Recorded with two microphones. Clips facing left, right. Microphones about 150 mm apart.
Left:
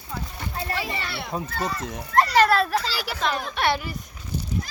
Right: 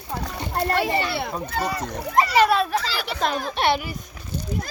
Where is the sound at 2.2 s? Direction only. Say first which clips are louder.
Even; 5° right (ahead or behind).